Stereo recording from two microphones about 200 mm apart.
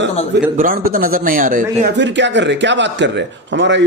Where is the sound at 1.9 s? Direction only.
60° right (ahead or behind).